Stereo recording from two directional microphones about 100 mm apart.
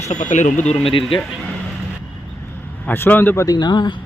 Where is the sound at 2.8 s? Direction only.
15° left (ahead or behind).